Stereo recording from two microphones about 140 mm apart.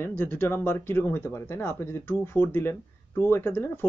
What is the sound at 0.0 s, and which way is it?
Speech, 15° left (ahead or behind).